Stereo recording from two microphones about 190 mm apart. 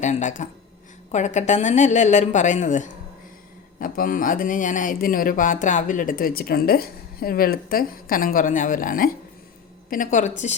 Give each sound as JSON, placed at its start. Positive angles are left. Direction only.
{"t": 0.0, "sound": "a woman's voice", "side_deg": 40}